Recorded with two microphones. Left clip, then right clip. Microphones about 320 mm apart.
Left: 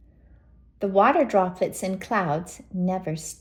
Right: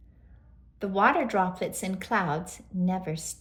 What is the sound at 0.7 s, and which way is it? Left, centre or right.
A woman's voice, centre.